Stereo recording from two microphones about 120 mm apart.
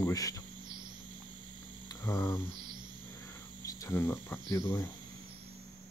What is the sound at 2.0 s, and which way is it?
Hum, 15° left (ahead or behind).